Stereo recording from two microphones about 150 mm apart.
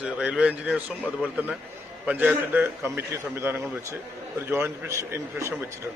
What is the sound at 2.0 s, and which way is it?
Speech, 10° right (ahead or behind).